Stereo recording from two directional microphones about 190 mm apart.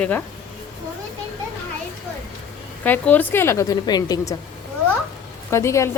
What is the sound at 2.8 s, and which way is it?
A woman's voice, 10° left (ahead or behind).